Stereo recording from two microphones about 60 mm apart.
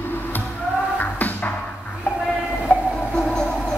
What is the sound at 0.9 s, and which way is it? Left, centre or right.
Music, left.